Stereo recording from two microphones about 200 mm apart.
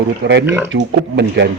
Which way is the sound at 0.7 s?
60° right (ahead or behind).